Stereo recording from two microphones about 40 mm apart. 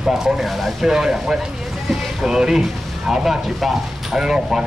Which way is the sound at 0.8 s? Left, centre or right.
Centre.